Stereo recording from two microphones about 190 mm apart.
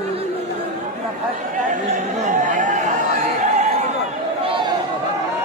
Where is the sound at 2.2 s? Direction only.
40° right (ahead or behind).